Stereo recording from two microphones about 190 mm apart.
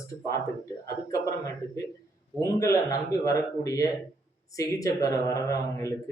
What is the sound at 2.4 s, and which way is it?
Speech, 15° left (ahead or behind).